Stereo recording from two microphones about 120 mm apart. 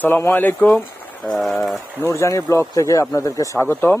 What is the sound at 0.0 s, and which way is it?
Speech, 20° left (ahead or behind).